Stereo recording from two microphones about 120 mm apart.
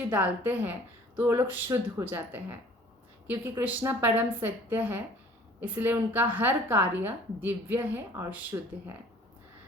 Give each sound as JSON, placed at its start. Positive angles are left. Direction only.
{"t": 0.1, "sound": "a woman's voice", "side_deg": -15}
{"t": 3.6, "sound": "a woman's voice", "side_deg": -15}